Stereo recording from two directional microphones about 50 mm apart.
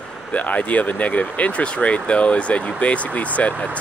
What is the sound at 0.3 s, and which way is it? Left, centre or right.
Speech, left.